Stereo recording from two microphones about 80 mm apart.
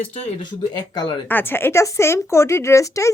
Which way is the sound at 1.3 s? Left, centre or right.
Left.